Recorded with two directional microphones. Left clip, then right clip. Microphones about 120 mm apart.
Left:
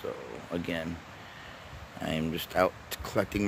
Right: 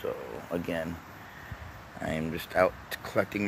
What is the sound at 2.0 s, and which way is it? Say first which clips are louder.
Speech: even; 35° left (ahead or behind).